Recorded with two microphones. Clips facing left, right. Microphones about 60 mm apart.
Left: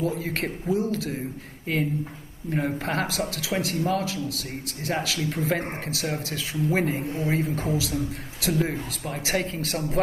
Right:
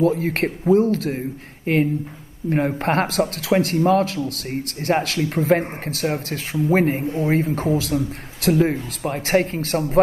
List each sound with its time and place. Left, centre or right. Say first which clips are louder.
0.0 s speech: right 8 dB; right